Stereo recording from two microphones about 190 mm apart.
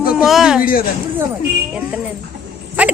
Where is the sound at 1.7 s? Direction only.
5° right (ahead or behind).